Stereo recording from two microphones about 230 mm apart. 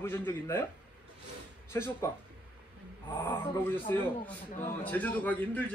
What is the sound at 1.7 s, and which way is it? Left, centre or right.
Speech, centre.